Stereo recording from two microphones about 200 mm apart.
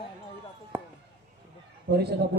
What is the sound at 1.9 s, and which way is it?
Speech, 55° right (ahead or behind).